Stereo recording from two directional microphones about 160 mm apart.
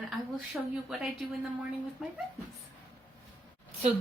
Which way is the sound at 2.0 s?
5° right (ahead or behind).